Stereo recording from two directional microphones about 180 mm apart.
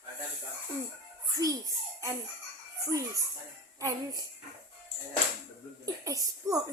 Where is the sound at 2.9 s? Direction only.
20° right (ahead or behind).